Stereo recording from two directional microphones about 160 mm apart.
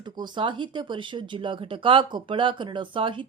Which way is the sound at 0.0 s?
30° right (ahead or behind).